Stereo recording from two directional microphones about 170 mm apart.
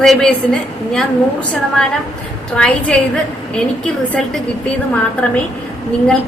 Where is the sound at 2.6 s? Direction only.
5° left (ahead or behind).